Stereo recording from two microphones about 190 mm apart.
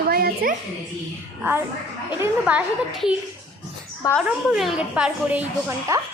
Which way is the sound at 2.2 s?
10° right (ahead or behind).